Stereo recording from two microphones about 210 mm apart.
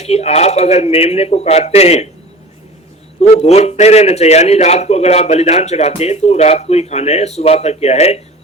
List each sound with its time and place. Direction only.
0.0 s a man's voice: 30° left (ahead or behind)
3.2 s a man's voice: 30° left (ahead or behind)